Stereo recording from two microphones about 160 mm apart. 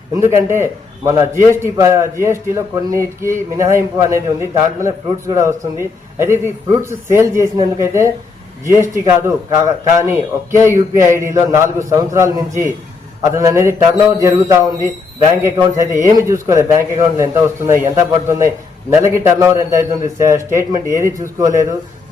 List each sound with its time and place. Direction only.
0.1 s a man's voice: 15° right (ahead or behind)